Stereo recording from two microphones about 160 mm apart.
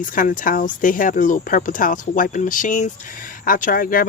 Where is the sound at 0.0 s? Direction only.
55° left (ahead or behind).